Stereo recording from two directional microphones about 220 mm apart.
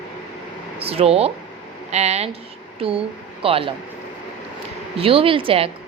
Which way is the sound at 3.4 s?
25° right (ahead or behind).